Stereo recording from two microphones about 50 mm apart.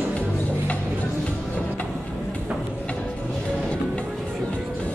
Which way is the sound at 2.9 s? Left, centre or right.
Left.